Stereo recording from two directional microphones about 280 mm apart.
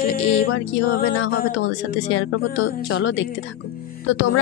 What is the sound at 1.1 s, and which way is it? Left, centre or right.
A woman's voice, left.